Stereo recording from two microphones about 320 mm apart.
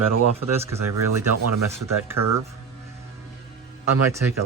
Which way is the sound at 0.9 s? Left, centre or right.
Right.